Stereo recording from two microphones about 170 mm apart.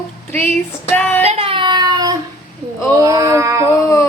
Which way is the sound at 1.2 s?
35° right (ahead or behind).